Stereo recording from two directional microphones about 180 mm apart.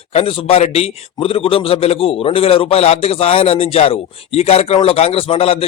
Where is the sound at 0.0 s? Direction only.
35° left (ahead or behind).